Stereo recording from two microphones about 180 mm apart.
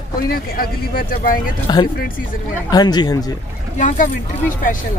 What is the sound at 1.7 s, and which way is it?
A man's voice, 25° left (ahead or behind).